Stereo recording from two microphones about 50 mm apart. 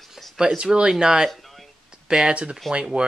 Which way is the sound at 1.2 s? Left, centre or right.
Centre.